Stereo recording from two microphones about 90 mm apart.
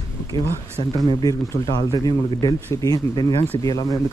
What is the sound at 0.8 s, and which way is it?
Speech, 85° left.